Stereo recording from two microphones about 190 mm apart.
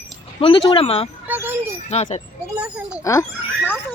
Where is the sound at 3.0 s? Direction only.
15° left (ahead or behind).